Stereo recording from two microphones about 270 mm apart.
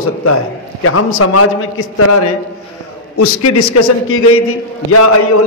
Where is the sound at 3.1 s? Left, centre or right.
Left.